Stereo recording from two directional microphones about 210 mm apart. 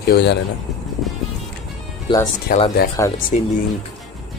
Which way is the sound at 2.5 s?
45° left (ahead or behind).